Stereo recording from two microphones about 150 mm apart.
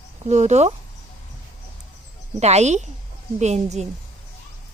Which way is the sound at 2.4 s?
45° right (ahead or behind).